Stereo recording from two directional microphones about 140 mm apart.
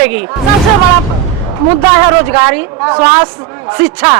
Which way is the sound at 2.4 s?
15° right (ahead or behind).